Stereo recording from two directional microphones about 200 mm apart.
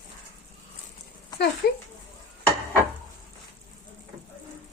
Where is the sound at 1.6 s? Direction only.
55° left (ahead or behind).